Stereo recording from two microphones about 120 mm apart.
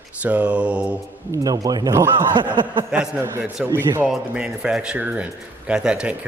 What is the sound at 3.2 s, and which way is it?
Speech, 20° right (ahead or behind).